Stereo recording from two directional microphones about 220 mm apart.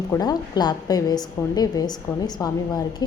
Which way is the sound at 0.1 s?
20° left (ahead or behind).